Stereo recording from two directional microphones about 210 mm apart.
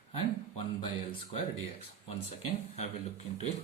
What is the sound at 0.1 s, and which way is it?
Speech, 30° left (ahead or behind).